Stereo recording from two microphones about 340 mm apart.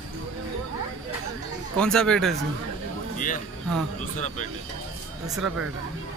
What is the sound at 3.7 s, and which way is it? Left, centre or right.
Speech, centre.